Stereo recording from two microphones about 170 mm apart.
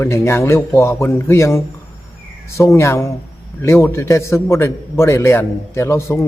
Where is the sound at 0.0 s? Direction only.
15° left (ahead or behind).